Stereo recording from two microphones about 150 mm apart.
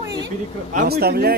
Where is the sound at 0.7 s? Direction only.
90° right.